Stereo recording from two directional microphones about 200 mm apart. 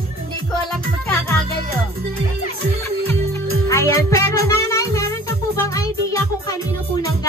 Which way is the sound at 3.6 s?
15° left (ahead or behind).